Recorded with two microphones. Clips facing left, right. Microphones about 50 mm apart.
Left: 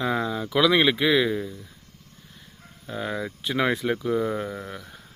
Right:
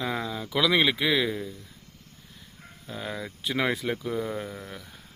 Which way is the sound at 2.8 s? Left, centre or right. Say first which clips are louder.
Left 5 dB; centre.